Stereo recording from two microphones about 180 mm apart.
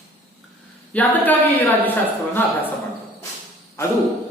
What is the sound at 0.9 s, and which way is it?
Speech, 10° left (ahead or behind).